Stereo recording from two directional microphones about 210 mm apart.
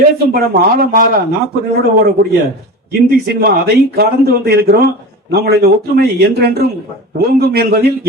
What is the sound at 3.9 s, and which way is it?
A man's voice, 50° right (ahead or behind).